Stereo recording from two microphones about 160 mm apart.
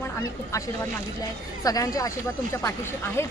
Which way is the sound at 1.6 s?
20° left (ahead or behind).